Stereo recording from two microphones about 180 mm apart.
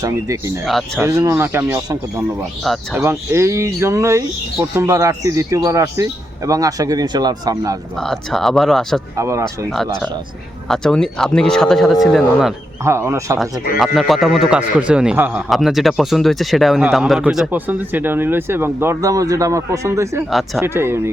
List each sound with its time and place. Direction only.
0.0 s speech: 15° right (ahead or behind)
0.6 s speech: centre (ahead or behind)
0.9 s speech: 15° right (ahead or behind)
7.9 s speech: centre (ahead or behind)
9.1 s speech: 15° right (ahead or behind)
9.6 s speech: centre (ahead or behind)
12.8 s speech: 15° right (ahead or behind)
13.7 s speech: centre (ahead or behind)